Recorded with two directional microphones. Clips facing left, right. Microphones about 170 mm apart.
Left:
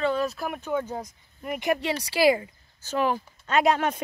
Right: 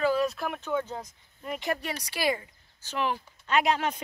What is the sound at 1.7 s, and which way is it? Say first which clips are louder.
Speech: left 8 dB; 30° left (ahead or behind).